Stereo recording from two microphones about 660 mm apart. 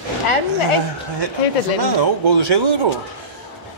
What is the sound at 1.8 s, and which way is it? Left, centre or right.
Speech, right.